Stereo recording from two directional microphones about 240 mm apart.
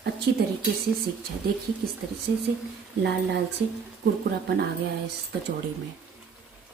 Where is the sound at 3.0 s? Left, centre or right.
Right.